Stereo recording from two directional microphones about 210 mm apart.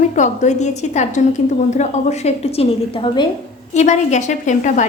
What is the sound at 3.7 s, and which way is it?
A woman's voice, 35° left (ahead or behind).